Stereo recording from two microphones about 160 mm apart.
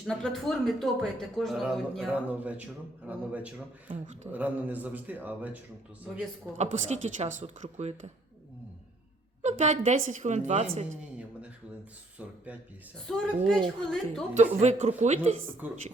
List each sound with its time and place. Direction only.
0.0 s a man's voice: 5° left (ahead or behind)
3.8 s speech: 50° right (ahead or behind)
4.3 s a man's voice: 10° right (ahead or behind)
6.6 s speech: 45° right (ahead or behind)
9.4 s speech: 45° right (ahead or behind)
12.2 s a man's voice: 10° right (ahead or behind)
13.1 s speech: 5° left (ahead or behind)
14.6 s speech: 45° right (ahead or behind)
15.6 s a man's voice: 10° right (ahead or behind)